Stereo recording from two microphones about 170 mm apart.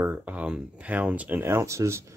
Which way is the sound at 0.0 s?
10° right (ahead or behind).